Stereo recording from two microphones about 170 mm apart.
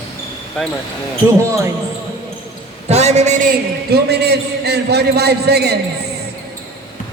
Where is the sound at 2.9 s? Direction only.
40° right (ahead or behind).